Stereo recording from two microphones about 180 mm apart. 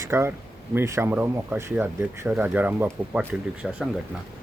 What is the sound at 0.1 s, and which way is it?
Speech, 15° right (ahead or behind).